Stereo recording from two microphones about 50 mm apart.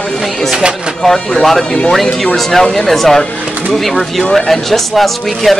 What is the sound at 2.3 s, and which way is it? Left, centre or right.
Speech, centre.